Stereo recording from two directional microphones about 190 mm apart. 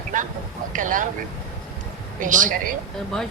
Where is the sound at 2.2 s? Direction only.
45° right (ahead or behind).